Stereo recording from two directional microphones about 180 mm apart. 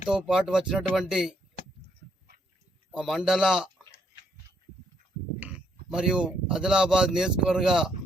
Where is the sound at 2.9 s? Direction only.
5° right (ahead or behind).